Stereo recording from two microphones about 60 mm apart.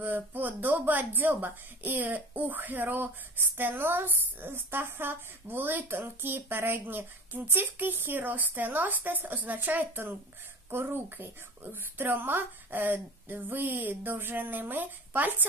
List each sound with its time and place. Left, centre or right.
0.0 s a woman's voice: right